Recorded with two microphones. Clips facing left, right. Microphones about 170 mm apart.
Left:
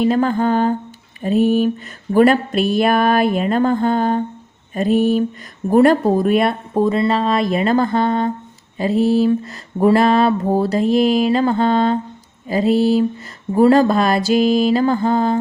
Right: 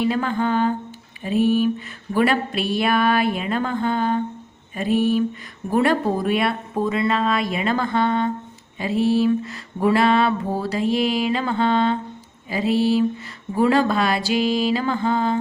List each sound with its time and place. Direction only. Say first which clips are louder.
0.0 s speech: left 5 dB; 40° left (ahead or behind)
5.7 s mantra: left 7 dB; 45° left (ahead or behind)
13.5 s speech: left 6 dB; 40° left (ahead or behind)